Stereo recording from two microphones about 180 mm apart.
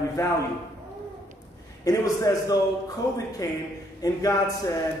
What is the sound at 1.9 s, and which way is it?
A man's voice, 20° left (ahead or behind).